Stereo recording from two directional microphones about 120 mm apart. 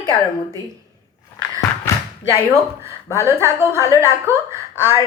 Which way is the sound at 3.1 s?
25° right (ahead or behind).